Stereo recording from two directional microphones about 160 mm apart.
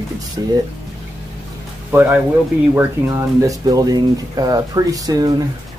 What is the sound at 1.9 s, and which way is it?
Speech, 10° right (ahead or behind).